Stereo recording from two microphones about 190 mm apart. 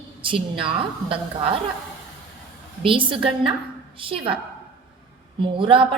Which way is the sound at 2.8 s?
25° right (ahead or behind).